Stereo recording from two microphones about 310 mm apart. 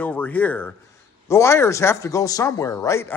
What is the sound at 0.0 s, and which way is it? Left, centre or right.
Speech, centre.